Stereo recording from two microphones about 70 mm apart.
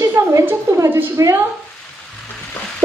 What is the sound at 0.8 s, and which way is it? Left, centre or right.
Speech, right.